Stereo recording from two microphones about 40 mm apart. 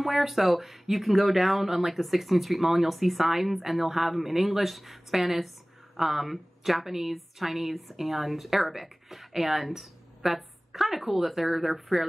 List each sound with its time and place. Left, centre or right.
0.0 s a woman's voice: centre